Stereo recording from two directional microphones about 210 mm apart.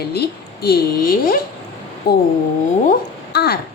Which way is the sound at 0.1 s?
50° left (ahead or behind).